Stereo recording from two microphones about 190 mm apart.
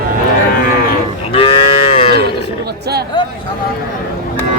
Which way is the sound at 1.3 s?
30° left (ahead or behind).